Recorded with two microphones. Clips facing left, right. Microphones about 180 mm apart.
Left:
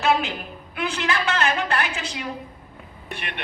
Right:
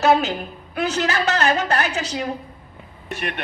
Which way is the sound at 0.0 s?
40° right (ahead or behind).